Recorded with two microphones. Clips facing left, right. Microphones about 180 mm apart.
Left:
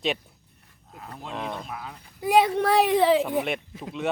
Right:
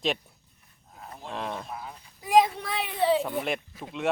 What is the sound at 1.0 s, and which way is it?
Speech, 75° left (ahead or behind).